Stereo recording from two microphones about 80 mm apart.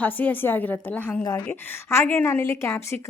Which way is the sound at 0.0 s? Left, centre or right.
Left.